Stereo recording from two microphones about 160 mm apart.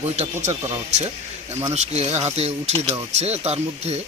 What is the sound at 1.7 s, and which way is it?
Speech, 40° right (ahead or behind).